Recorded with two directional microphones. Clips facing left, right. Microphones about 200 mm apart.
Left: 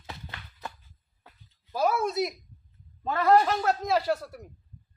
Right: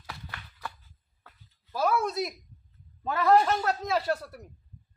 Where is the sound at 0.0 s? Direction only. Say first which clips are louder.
Left 1 dB; 20° left (ahead or behind).